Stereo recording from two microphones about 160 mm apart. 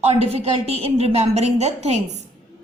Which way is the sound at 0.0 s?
40° right (ahead or behind).